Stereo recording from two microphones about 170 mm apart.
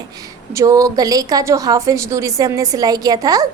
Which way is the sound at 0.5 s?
20° right (ahead or behind).